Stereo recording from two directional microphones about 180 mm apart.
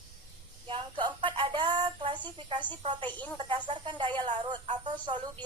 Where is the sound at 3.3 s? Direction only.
25° right (ahead or behind).